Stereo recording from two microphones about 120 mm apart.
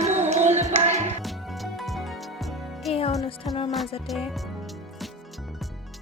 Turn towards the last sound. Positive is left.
turn(degrees=0)  # may be behind; listen again after turning